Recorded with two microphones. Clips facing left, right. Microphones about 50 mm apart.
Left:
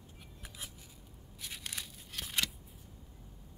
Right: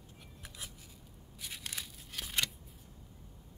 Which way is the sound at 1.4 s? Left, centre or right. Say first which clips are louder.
Even; centre.